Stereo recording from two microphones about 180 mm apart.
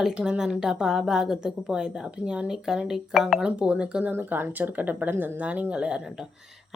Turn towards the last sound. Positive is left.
turn(degrees=-5)  # may be behind; listen again after turning